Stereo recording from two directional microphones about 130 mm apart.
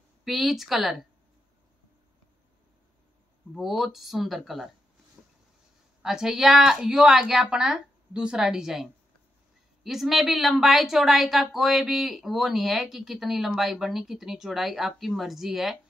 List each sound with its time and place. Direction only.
0.2 s a woman's voice: centre (ahead or behind)
3.5 s a woman's voice: centre (ahead or behind)
5.2 s a sound: 5° right (ahead or behind)
6.0 s a woman's voice: 5° right (ahead or behind)